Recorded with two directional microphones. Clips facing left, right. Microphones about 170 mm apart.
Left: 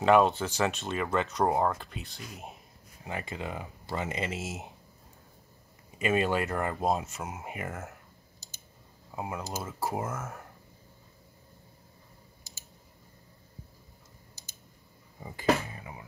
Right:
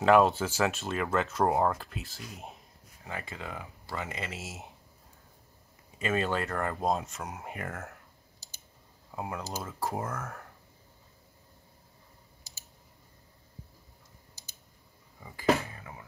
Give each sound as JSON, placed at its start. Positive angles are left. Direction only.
{"t": 0.0, "sound": "speech", "side_deg": 0}
{"t": 3.0, "sound": "speech", "side_deg": 20}
{"t": 5.9, "sound": "speech", "side_deg": 10}
{"t": 9.1, "sound": "speech", "side_deg": 0}
{"t": 15.1, "sound": "a sound", "side_deg": 25}
{"t": 15.7, "sound": "music", "side_deg": 15}